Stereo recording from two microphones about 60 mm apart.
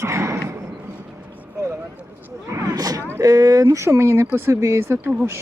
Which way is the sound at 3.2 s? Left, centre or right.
Right.